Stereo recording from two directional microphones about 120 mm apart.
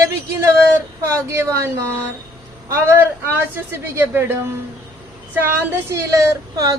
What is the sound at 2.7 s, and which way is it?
A woman's voice, 20° right (ahead or behind).